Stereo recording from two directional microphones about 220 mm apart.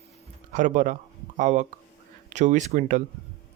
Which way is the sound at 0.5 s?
35° right (ahead or behind).